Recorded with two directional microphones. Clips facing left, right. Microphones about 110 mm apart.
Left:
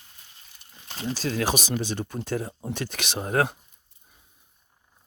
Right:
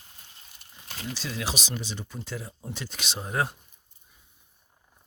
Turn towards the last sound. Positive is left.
turn(degrees=70)  # may be behind; listen again after turning